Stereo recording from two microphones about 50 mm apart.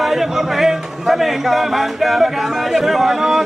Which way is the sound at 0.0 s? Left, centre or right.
Centre.